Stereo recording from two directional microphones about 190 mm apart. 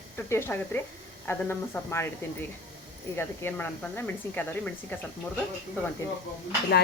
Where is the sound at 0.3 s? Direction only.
10° left (ahead or behind).